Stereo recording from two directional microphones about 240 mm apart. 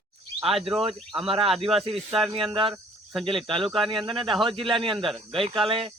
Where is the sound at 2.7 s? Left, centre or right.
Centre.